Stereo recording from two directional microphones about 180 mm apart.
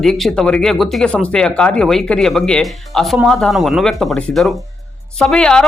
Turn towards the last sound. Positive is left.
turn(degrees=5)  # may be behind; listen again after turning